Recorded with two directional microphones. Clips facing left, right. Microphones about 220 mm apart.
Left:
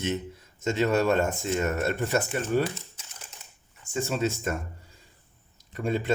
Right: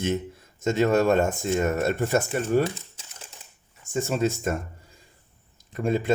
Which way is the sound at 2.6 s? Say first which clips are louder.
Right 3 dB; 25° right (ahead or behind).